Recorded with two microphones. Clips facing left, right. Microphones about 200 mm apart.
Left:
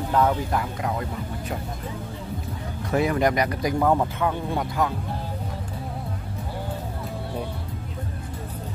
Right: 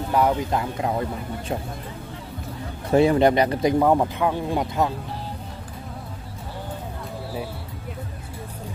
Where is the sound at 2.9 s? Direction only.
30° right (ahead or behind).